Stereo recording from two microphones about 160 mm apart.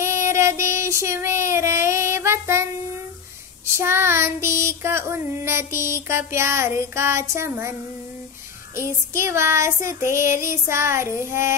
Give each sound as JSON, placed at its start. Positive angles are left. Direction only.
{"t": 0.0, "sound": "child singing", "side_deg": -15}
{"t": 3.6, "sound": "child singing", "side_deg": -15}
{"t": 8.7, "sound": "child singing", "side_deg": -15}